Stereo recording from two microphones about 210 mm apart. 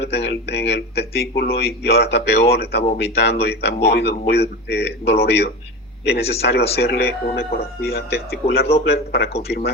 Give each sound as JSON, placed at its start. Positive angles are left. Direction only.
{"t": 0.0, "sound": "speech", "side_deg": 55}